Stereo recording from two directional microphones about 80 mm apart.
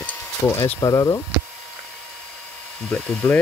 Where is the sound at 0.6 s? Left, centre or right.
Left.